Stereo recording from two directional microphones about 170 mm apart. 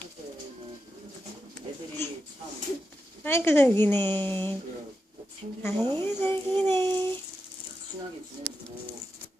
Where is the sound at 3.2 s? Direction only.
15° left (ahead or behind).